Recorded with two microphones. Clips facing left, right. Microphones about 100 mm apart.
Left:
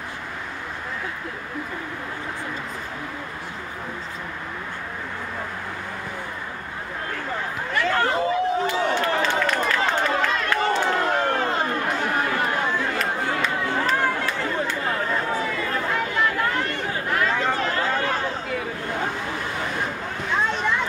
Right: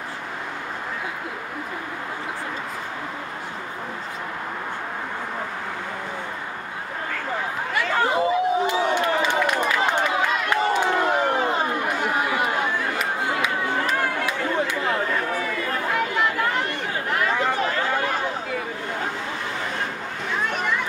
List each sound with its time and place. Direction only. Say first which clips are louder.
7.7 s a sound: even; 15° right (ahead or behind)
13.0 s chatter: even; 10° right (ahead or behind)
15.0 s run: even; 20° left (ahead or behind)
16.2 s chatter: even; 15° right (ahead or behind)